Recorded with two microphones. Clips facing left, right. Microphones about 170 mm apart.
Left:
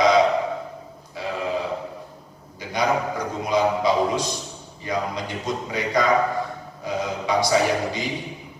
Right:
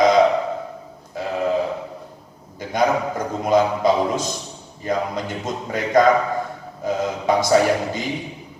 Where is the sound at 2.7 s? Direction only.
50° right (ahead or behind).